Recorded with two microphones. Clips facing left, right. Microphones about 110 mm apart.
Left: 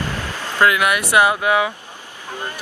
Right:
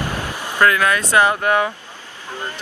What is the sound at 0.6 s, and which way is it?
Speech, 15° left (ahead or behind).